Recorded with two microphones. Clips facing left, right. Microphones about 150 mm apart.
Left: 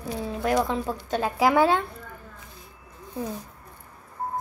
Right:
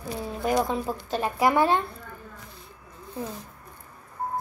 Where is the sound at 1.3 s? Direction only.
90° left.